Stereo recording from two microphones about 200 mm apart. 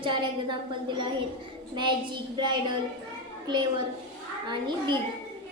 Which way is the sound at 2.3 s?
20° right (ahead or behind).